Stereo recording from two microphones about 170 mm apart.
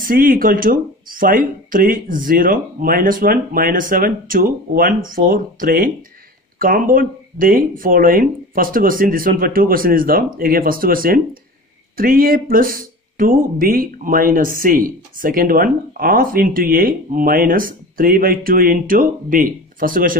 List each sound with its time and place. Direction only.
0.0 s speech: 55° right (ahead or behind)